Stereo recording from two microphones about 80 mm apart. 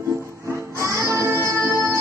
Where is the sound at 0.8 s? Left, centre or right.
Right.